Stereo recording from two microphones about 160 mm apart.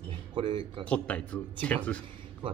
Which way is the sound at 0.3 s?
30° right (ahead or behind).